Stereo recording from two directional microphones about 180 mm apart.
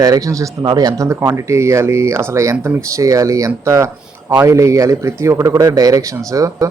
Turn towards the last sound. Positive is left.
turn(degrees=-20)  # may be behind; listen again after turning